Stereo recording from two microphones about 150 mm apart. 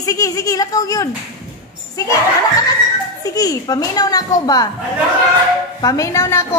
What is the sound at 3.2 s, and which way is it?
A woman's voice, 25° left (ahead or behind).